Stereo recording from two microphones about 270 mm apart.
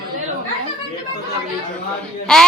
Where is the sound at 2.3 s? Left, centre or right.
Centre.